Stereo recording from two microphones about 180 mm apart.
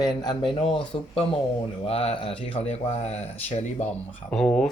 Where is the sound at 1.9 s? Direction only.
35° left (ahead or behind).